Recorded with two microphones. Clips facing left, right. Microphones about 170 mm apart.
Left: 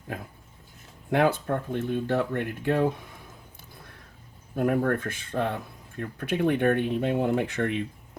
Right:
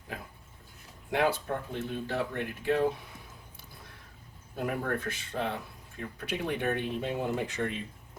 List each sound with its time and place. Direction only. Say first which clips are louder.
1.1 s speech: left 5 dB; 55° left (ahead or behind)
4.5 s speech: left 8 dB; 50° left (ahead or behind)